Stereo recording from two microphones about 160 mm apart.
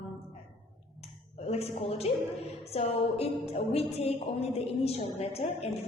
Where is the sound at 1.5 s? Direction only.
40° left (ahead or behind).